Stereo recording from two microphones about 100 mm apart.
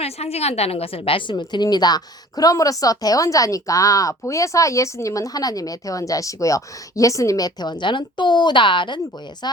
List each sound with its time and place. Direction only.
0.0 s a woman's voice: 90° left; by 9.0 s 55° left (ahead or behind)